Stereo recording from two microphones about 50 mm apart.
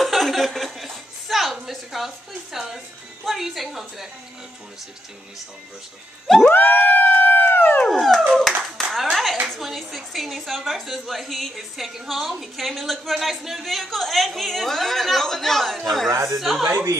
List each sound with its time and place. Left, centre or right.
0.0 s chuckle: centre
3.3 s a sound: centre
6.2 s a woman's voice: centre
6.5 s a sound: left
6.8 s howl: left
7.8 s dog: centre
8.4 s a woman's voice: centre
16.1 s speech: right
16.3 s a woman's voice: centre